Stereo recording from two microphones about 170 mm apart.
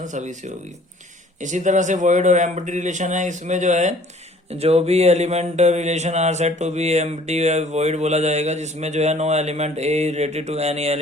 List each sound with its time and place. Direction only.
0.0 s a man's voice: 45° right (ahead or behind)